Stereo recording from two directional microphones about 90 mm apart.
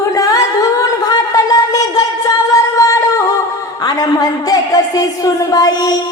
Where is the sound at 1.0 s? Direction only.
45° left (ahead or behind).